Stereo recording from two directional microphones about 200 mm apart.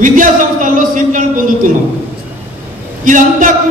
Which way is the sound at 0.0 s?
40° right (ahead or behind).